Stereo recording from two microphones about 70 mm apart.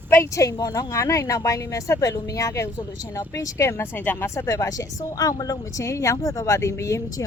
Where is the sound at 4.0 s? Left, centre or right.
Left.